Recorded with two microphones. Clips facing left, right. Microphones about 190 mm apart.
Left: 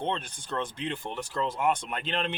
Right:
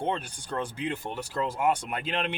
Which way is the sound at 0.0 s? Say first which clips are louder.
Right 1 dB; 10° right (ahead or behind).